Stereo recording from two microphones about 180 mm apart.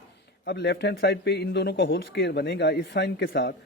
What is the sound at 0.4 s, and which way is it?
A man's voice, 70° left (ahead or behind).